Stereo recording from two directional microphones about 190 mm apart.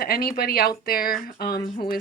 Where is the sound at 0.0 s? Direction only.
55° left (ahead or behind).